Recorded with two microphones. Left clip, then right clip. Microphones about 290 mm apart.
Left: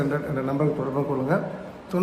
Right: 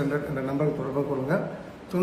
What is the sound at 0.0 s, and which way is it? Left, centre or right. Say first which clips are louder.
A man's voice: left 2 dB; centre.